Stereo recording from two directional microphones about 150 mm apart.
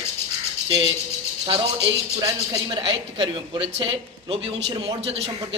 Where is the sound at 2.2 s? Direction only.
25° right (ahead or behind).